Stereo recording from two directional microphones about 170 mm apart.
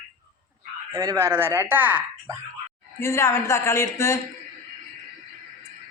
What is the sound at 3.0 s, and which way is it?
Speech, 15° left (ahead or behind).